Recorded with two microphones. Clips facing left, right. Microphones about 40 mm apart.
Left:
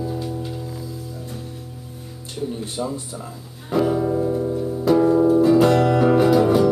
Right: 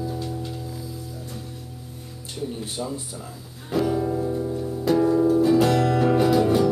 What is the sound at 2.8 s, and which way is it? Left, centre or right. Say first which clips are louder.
Speech: left 4 dB; centre.